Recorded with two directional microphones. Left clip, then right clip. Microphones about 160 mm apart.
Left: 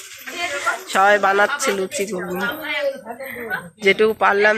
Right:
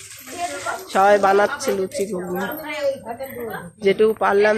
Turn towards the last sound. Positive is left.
turn(degrees=0)  # may be behind; listen again after turning